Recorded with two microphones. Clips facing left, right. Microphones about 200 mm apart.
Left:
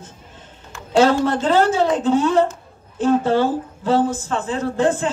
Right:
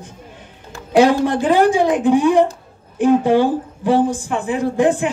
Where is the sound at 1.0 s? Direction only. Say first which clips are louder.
Right 2 dB; 15° right (ahead or behind).